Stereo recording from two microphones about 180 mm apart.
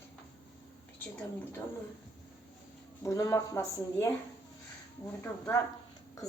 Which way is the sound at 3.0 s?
15° left (ahead or behind).